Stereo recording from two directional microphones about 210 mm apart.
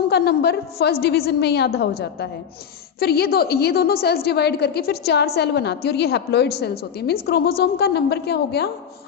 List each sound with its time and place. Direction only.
0.1 s a woman's voice: 50° left (ahead or behind)